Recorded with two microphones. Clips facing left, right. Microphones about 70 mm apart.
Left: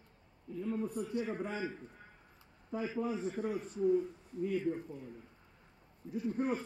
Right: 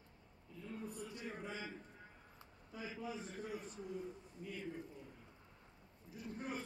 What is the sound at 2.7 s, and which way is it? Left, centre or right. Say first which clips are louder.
Speech: left 10 dB; left.